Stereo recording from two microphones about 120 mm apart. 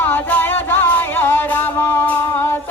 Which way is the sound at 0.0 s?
15° left (ahead or behind).